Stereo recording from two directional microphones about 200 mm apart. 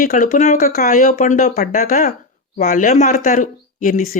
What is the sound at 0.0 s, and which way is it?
Speech, 45° left (ahead or behind).